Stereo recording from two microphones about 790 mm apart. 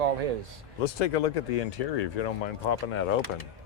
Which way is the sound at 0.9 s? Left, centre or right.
Left.